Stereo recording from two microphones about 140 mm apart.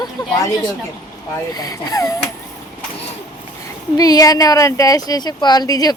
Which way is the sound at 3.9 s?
25° left (ahead or behind).